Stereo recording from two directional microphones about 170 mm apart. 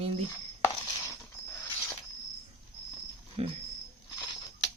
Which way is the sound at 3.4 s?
35° right (ahead or behind).